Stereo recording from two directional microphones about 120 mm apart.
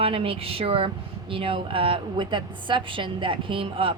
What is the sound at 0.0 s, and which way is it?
A woman's voice, 50° right (ahead or behind).